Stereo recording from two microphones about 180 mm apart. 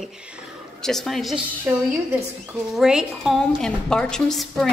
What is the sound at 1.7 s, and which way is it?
A woman's voice, 10° right (ahead or behind).